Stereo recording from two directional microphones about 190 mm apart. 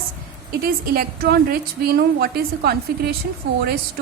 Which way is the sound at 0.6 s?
50° right (ahead or behind).